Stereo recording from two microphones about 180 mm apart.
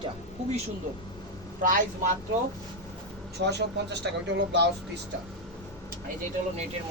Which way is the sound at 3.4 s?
70° right (ahead or behind).